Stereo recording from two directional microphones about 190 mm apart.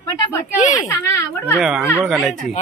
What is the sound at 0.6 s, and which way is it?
Speech, 40° left (ahead or behind).